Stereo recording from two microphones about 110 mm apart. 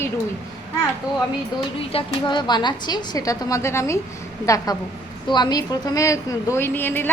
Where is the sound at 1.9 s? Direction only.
55° left (ahead or behind).